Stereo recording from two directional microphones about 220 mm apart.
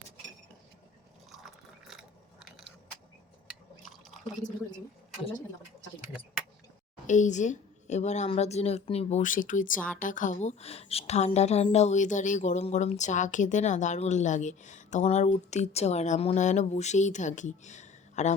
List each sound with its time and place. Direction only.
1.9 s biting: centre (ahead or behind)
7.1 s a woman's voice: 35° left (ahead or behind)